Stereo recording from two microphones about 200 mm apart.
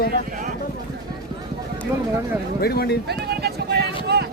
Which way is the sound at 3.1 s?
55° right (ahead or behind).